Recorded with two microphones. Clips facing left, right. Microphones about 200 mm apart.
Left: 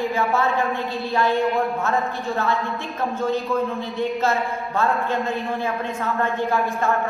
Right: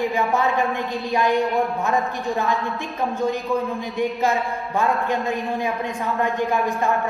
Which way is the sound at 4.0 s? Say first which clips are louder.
Right 1 dB; 15° right (ahead or behind).